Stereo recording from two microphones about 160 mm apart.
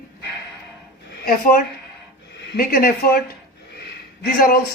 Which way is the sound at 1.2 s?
65° left (ahead or behind).